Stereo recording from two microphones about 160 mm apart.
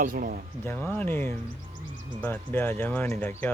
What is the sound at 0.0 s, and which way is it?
Speech, 65° right (ahead or behind).